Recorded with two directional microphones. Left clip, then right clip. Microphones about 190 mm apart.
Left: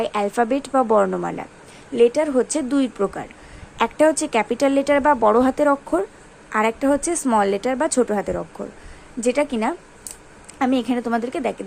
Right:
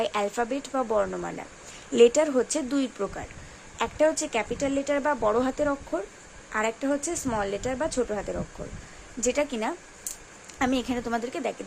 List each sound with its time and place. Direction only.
0.0 s speech: 10° left (ahead or behind)
1.9 s speech: 15° right (ahead or behind)
2.2 s speech: centre (ahead or behind)